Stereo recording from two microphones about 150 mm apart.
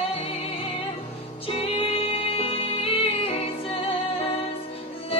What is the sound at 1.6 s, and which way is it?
Music, 40° left (ahead or behind).